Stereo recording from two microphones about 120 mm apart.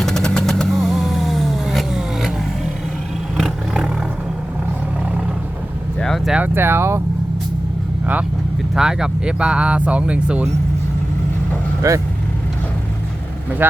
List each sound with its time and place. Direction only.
0.0 s vehicle: 5° left (ahead or behind)
3.3 s vehicle: 5° right (ahead or behind)
6.0 s vehicle: 5° left (ahead or behind)
6.3 s speech: 15° right (ahead or behind)
8.7 s speech: 5° right (ahead or behind)
11.8 s speech: 25° right (ahead or behind)
13.6 s speech: 15° right (ahead or behind)